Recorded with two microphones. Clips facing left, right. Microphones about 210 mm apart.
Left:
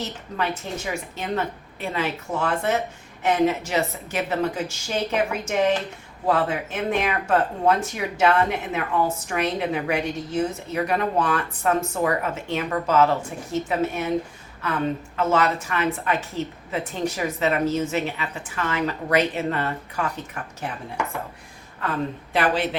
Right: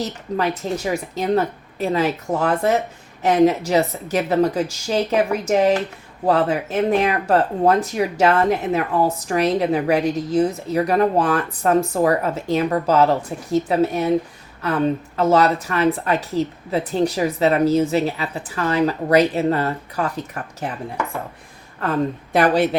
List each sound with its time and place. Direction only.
0.0 s speech: 40° right (ahead or behind)
21.8 s a woman's voice: 40° right (ahead or behind)